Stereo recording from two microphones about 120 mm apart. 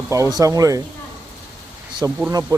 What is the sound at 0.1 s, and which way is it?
Speech, 30° right (ahead or behind).